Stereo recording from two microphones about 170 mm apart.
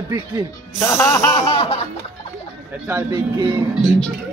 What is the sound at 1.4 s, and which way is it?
Snicker, 35° left (ahead or behind).